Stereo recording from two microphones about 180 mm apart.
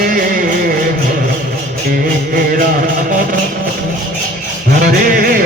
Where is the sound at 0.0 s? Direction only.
55° right (ahead or behind).